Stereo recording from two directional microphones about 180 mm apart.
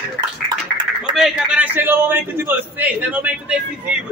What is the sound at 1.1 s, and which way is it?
A man's voice, 5° right (ahead or behind).